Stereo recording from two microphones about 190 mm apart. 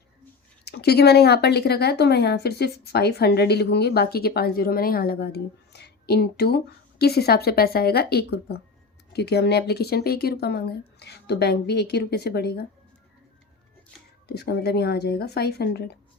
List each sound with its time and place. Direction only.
0.6 s a woman's voice: 60° left (ahead or behind)
14.3 s a woman's voice: 60° left (ahead or behind)